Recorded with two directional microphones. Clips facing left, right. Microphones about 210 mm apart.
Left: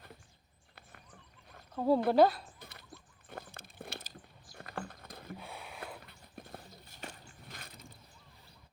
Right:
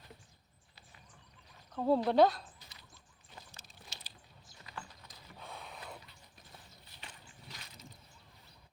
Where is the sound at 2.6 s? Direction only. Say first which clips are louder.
Left 8 dB; 55° left (ahead or behind).